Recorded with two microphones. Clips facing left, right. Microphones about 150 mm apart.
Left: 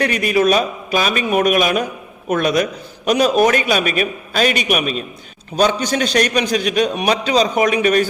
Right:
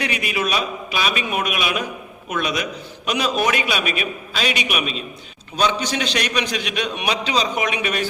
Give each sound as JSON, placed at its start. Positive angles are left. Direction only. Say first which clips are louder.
{"t": 0.0, "sound": "a man's voice", "louder": "left 8 dB", "side_deg": 45}